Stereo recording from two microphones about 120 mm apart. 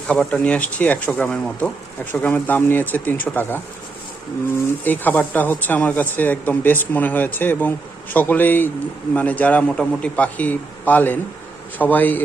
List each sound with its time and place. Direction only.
0.1 s speech: 5° left (ahead or behind)
4.8 s speech: 15° left (ahead or behind)